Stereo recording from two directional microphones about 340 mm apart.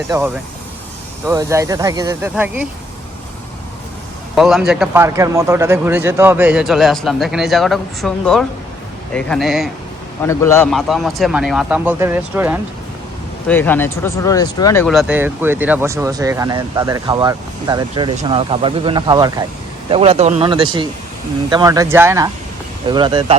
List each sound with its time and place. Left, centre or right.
1.3 s speech: centre
4.4 s speech: centre
13.5 s speech: centre